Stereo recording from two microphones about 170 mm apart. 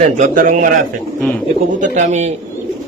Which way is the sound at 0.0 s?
50° right (ahead or behind).